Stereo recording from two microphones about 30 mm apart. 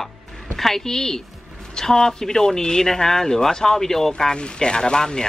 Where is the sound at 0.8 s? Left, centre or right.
Centre.